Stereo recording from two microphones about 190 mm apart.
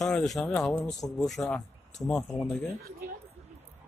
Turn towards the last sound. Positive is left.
turn(degrees=-55)  # may be behind; listen again after turning